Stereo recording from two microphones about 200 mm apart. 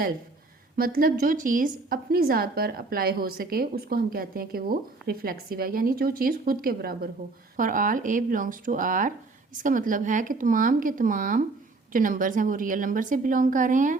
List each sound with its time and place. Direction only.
0.8 s a woman's voice: 45° right (ahead or behind)